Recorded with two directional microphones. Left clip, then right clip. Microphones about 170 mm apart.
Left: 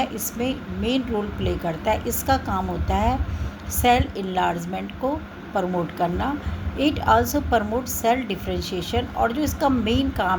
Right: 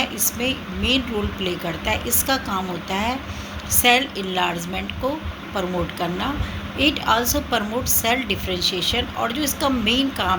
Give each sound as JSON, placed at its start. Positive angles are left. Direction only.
{"t": 0.0, "sound": "a woman's voice", "side_deg": 60}